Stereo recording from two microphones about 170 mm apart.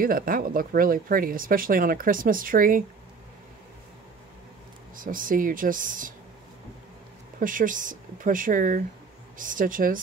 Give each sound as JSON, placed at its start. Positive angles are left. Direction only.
{"t": 0.0, "sound": "speech", "side_deg": -55}
{"t": 4.9, "sound": "speech", "side_deg": -55}
{"t": 7.3, "sound": "speech", "side_deg": -50}